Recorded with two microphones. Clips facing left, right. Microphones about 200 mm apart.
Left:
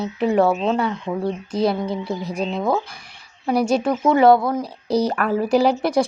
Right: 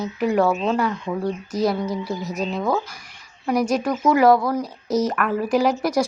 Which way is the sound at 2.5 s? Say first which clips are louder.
Left 1 dB; centre (ahead or behind).